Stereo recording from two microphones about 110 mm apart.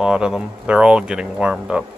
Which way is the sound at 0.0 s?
5° right (ahead or behind).